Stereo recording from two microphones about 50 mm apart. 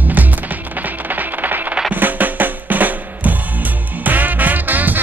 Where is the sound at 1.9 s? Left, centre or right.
Right.